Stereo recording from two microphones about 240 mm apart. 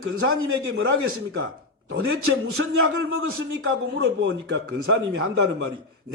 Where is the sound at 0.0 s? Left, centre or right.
Right.